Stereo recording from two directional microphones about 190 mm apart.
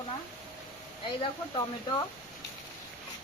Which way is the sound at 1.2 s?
25° left (ahead or behind).